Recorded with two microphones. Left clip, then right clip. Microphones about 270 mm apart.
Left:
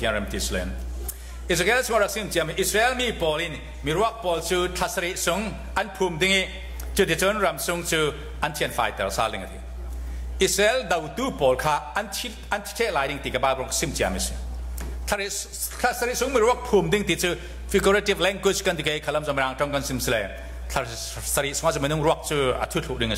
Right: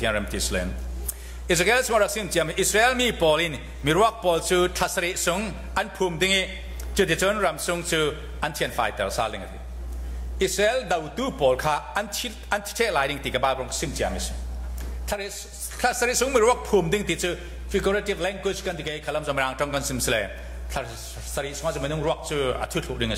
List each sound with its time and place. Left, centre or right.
0.0 s a man's voice: centre
10.4 s a man's voice: centre
15.8 s a man's voice: centre
20.7 s a man's voice: centre